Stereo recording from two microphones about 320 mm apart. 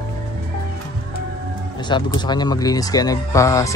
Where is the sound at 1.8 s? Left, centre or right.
Centre.